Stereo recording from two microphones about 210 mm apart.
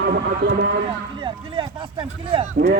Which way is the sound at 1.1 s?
20° right (ahead or behind).